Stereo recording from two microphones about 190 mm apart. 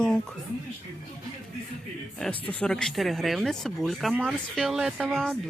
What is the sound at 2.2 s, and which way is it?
Speech, 5° left (ahead or behind).